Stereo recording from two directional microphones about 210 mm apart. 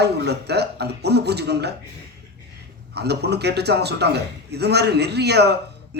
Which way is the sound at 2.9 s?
50° right (ahead or behind).